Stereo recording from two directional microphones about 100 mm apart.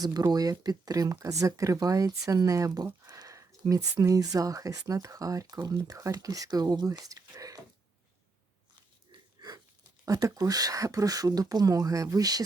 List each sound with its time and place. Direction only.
0.0 s speech: 40° right (ahead or behind)
9.1 s wheeze: 45° right (ahead or behind)
10.1 s speech: 35° right (ahead or behind)